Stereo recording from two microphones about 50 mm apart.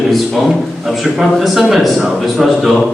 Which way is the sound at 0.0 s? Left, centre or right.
Centre.